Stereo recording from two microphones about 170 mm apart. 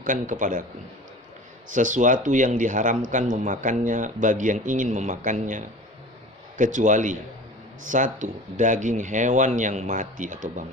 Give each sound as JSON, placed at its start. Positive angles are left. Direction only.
{"t": 0.0, "sound": "a man's voice", "side_deg": -50}
{"t": 1.7, "sound": "a man's voice", "side_deg": -50}